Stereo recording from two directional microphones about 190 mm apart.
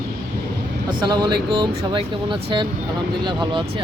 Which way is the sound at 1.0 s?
25° right (ahead or behind).